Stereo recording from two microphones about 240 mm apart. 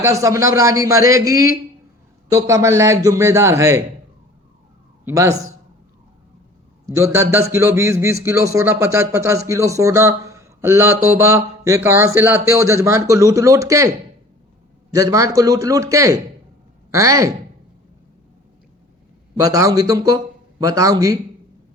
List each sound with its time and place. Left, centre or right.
0.0 s speech: centre
5.0 s a man's voice: centre
6.8 s speech: centre
14.9 s speech: centre
19.4 s speech: centre